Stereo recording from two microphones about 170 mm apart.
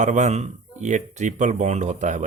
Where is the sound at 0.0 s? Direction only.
45° right (ahead or behind).